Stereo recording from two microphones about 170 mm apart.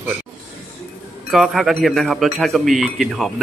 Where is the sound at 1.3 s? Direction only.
Centre (ahead or behind).